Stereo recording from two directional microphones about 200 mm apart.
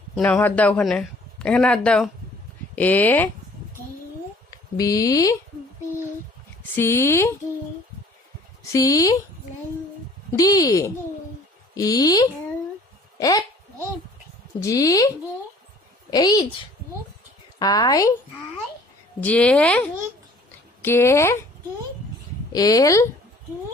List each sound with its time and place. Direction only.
0.2 s speech: 10° left (ahead or behind)
4.5 s speech: 20° left (ahead or behind)
6.7 s speech: 15° left (ahead or behind)
8.7 s speech: 15° left (ahead or behind)
10.3 s speech: 15° left (ahead or behind)
13.1 s a sound: 20° left (ahead or behind)
14.6 s a woman's voice: 15° left (ahead or behind)
17.6 s a woman's voice: 20° left (ahead or behind)
19.2 s speech: 5° left (ahead or behind)
22.5 s speech: 20° left (ahead or behind)